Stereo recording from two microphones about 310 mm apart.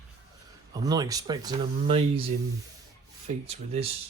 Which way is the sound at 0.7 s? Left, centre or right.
Centre.